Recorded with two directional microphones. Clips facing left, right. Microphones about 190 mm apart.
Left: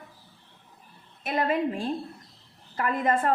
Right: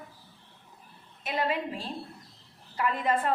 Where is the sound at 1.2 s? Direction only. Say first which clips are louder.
Left 4 dB; 50° left (ahead or behind).